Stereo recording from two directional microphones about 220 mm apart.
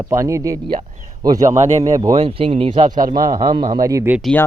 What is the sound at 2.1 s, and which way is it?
Speech, 25° right (ahead or behind).